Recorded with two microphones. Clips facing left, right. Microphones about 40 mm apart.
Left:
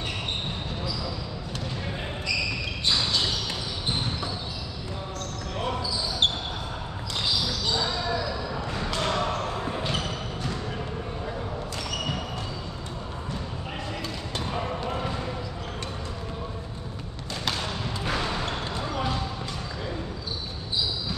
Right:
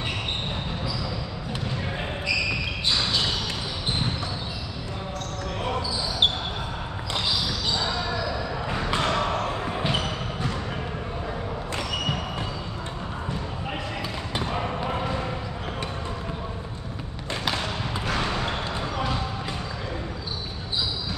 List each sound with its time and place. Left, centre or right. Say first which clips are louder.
8.6 s basketball bounce: right 4 dB; right
14.3 s basketball bounce: right 2 dB; centre